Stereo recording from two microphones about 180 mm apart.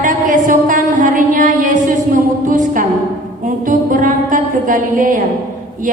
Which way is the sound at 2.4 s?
45° right (ahead or behind).